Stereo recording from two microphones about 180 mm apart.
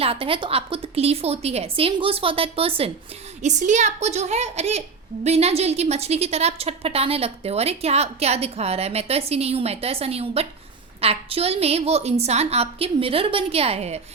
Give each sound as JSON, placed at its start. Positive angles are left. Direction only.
{"t": 0.0, "sound": "a woman's voice", "side_deg": -30}